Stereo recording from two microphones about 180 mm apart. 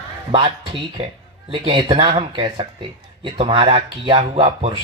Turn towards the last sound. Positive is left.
turn(degrees=-30)  # may be behind; listen again after turning